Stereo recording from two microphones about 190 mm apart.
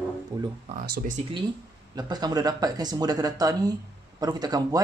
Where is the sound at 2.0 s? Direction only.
20° right (ahead or behind).